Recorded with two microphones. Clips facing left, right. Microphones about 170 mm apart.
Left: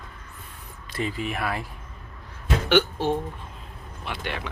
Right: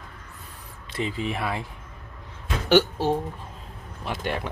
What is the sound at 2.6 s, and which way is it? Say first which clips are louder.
Speech: right 2 dB; 40° right (ahead or behind).